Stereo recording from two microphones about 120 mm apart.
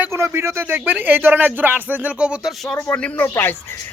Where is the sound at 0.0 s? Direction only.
20° right (ahead or behind).